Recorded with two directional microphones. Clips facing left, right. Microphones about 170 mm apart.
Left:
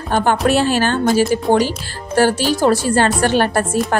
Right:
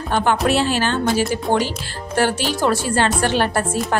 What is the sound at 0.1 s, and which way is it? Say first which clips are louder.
Speech: left 3 dB; 45° left (ahead or behind).